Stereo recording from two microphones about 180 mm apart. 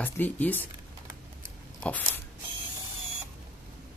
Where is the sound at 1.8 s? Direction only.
10° left (ahead or behind).